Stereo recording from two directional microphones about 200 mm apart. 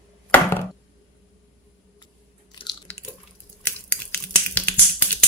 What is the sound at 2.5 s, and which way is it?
Chewing, 20° left (ahead or behind).